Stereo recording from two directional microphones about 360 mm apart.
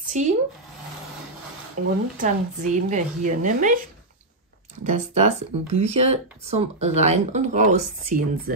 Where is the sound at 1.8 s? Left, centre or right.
Right.